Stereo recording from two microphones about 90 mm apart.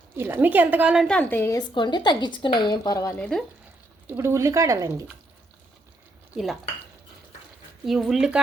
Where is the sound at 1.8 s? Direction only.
55° left (ahead or behind).